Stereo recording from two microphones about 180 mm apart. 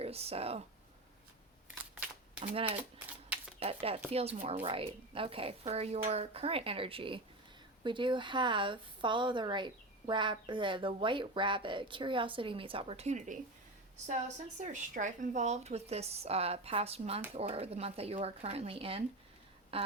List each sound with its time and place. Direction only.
0.0 s speech: 35° right (ahead or behind)
1.8 s camera: 5° right (ahead or behind)
2.4 s speech: 30° right (ahead or behind)
14.6 s speech: 45° right (ahead or behind)
19.7 s a sound: 30° right (ahead or behind)